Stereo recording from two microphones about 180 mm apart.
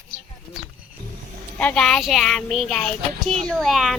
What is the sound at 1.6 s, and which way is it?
Speech, 5° left (ahead or behind).